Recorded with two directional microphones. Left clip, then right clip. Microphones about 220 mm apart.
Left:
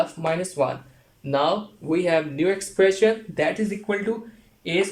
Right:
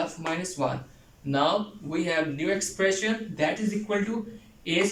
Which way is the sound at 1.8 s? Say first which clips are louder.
Left 8 dB; 50° left (ahead or behind).